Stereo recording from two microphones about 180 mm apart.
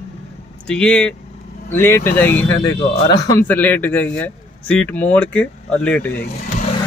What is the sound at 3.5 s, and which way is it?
Speech, 10° left (ahead or behind).